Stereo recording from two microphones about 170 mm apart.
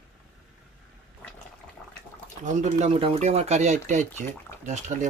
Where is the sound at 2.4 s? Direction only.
40° right (ahead or behind).